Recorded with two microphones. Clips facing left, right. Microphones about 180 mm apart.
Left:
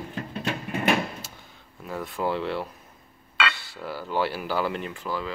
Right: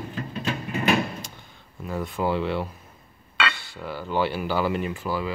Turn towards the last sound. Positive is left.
turn(degrees=-10)  # may be behind; listen again after turning